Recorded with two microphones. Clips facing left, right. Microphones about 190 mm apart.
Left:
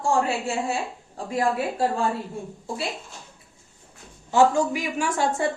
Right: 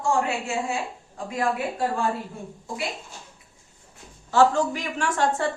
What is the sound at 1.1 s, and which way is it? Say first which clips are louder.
Speech: left 2 dB; 30° left (ahead or behind).